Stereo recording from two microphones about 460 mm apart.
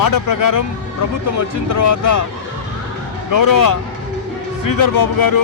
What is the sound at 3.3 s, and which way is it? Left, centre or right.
Speech, left.